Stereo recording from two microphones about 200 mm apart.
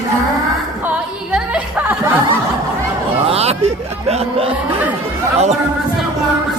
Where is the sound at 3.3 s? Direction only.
30° right (ahead or behind).